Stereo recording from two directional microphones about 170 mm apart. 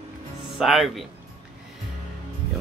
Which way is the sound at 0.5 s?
Centre (ahead or behind).